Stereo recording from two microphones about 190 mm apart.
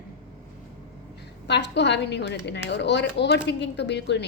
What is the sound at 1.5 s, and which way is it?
A woman's voice, 65° left (ahead or behind).